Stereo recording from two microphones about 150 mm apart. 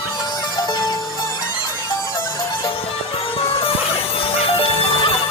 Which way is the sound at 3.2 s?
40° left (ahead or behind).